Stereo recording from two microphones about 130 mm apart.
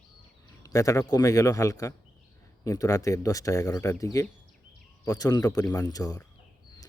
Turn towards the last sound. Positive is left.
turn(degrees=30)  # may be behind; listen again after turning